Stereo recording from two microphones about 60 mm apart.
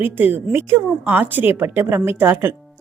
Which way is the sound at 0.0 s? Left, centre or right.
Right.